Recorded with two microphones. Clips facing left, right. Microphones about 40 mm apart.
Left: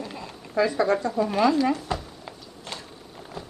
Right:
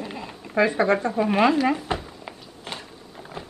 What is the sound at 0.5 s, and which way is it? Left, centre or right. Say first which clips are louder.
Speech: right 2 dB; right.